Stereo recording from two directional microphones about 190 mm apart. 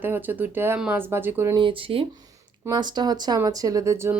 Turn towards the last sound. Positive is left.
turn(degrees=-15)  # may be behind; listen again after turning